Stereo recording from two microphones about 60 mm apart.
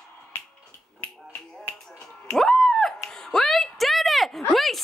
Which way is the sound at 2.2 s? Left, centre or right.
Centre.